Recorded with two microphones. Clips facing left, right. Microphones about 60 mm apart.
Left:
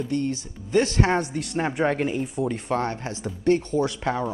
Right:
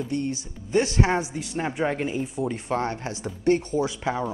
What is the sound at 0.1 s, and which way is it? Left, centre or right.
Speech, centre.